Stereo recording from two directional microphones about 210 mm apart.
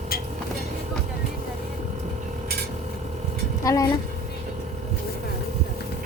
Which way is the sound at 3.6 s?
15° left (ahead or behind).